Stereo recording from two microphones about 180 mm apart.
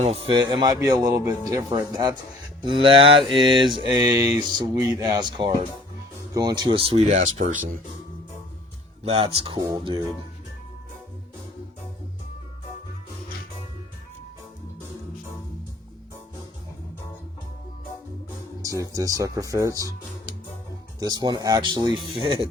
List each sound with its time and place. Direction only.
0.5 s speech: 20° right (ahead or behind)
7.1 s speech: 45° right (ahead or behind)
9.0 s speech: 30° right (ahead or behind)
18.6 s speech: 20° right (ahead or behind)
21.0 s speech: 20° right (ahead or behind)